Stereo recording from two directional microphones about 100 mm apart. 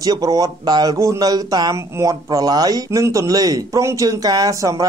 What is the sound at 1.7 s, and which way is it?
Speech, 30° right (ahead or behind).